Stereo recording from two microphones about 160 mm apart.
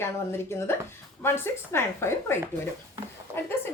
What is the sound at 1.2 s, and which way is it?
A woman's voice, 15° left (ahead or behind).